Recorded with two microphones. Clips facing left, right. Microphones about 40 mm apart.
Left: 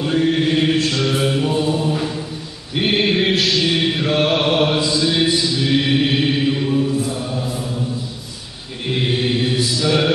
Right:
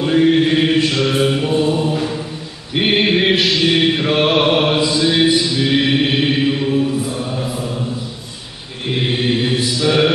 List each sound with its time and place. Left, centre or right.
0.0 s mantra: centre
2.0 s chant: centre
2.7 s mantra: right
8.8 s mantra: centre